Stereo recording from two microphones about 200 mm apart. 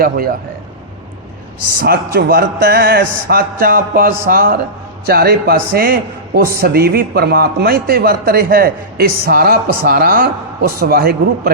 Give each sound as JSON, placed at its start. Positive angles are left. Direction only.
{"t": 0.0, "sound": "a man's voice", "side_deg": -45}
{"t": 1.8, "sound": "a man's voice", "side_deg": -45}